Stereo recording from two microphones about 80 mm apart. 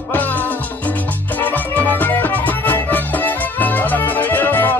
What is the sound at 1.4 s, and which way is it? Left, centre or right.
Music, left.